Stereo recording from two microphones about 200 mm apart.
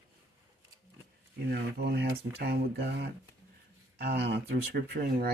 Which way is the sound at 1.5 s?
50° right (ahead or behind).